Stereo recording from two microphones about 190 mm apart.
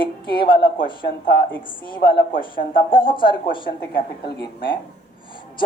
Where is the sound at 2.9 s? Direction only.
25° left (ahead or behind).